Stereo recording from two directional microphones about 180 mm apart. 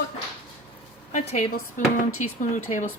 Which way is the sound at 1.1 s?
40° left (ahead or behind).